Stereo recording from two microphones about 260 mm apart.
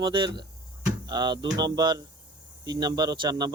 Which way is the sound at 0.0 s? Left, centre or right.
Centre.